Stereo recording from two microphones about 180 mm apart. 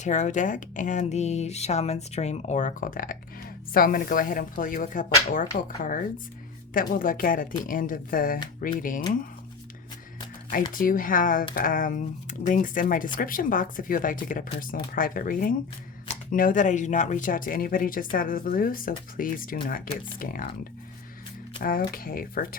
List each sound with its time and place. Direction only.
0.0 s speech: 40° left (ahead or behind)
10.7 s speech: 50° left (ahead or behind)
21.6 s speech: 50° left (ahead or behind)